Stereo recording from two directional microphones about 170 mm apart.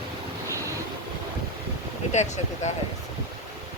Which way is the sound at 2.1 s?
45° left (ahead or behind).